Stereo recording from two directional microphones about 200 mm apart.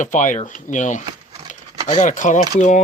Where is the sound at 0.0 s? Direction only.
40° left (ahead or behind).